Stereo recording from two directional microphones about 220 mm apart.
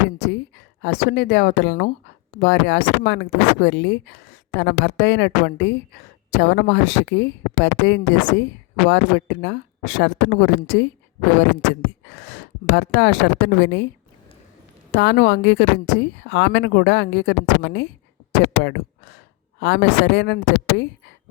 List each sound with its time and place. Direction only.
0.3 s speech: 50° left (ahead or behind)
12.1 s speech: 50° left (ahead or behind)
14.9 s speech: 50° left (ahead or behind)